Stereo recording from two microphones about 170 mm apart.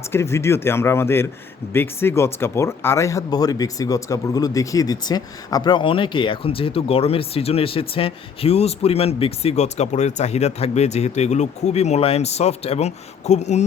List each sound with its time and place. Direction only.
0.1 s speech: 15° left (ahead or behind); by 13.7 s 40° left (ahead or behind)